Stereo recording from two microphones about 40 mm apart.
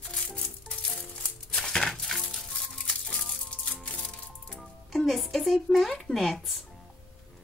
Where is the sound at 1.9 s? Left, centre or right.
Centre.